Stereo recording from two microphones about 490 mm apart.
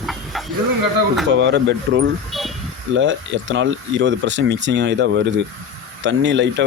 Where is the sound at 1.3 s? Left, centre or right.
Right.